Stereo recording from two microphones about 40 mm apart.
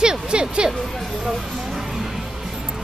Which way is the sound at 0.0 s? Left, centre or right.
Right.